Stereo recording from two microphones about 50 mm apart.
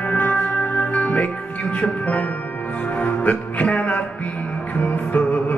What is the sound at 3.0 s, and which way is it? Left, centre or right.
Music, left.